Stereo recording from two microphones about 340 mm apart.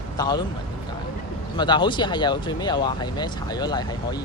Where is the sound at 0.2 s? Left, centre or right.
Centre.